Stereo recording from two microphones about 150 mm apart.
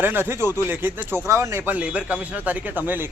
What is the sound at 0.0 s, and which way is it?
Speech, 15° right (ahead or behind).